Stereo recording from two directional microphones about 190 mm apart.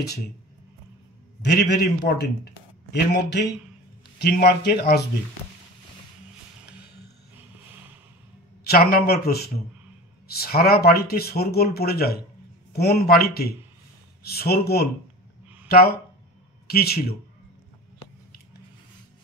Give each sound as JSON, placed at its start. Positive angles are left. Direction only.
{"t": 1.4, "sound": "a man's voice", "side_deg": 60}
{"t": 8.6, "sound": "a man's voice", "side_deg": 55}